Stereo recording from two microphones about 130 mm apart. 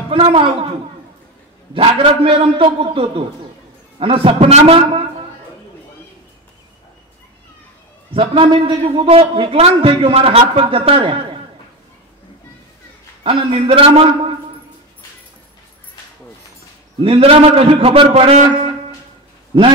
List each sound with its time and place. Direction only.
0.1 s a man's voice: 45° right (ahead or behind)
1.7 s a man's voice: 45° right (ahead or behind)
8.1 s a man's voice: 45° right (ahead or behind)
13.2 s a man's voice: 45° right (ahead or behind)
17.0 s a man's voice: 45° right (ahead or behind)